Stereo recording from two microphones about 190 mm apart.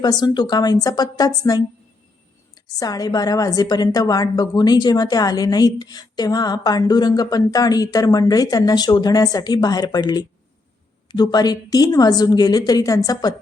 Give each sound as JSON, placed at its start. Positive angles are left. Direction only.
{"t": 0.0, "sound": "a woman's voice", "side_deg": 20}
{"t": 2.6, "sound": "a woman's voice", "side_deg": 20}